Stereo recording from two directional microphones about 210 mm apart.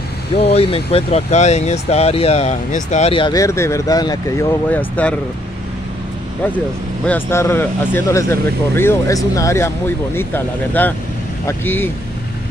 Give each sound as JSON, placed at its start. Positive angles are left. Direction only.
{"t": 0.4, "sound": "speech", "side_deg": 30}
{"t": 4.6, "sound": "speech", "side_deg": 5}
{"t": 7.1, "sound": "speech", "side_deg": 10}